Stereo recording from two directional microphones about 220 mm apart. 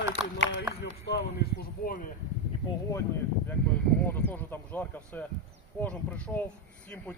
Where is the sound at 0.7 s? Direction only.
50° left (ahead or behind).